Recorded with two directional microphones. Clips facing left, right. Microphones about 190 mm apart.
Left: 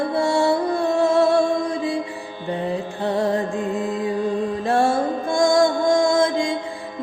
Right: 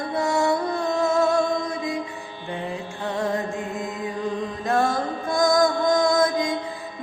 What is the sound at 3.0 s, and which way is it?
Music, 35° left (ahead or behind).